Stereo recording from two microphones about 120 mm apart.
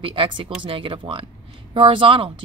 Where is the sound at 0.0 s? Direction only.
50° right (ahead or behind).